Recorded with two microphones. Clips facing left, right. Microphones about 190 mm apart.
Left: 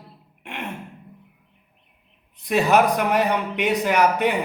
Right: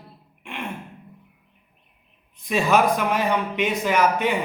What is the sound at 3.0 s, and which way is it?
Speech, 65° left (ahead or behind).